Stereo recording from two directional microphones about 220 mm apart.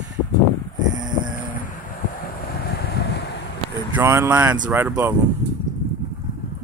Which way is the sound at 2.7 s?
50° left (ahead or behind).